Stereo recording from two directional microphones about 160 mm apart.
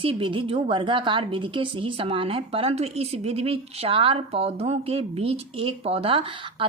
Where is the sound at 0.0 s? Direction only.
35° right (ahead or behind).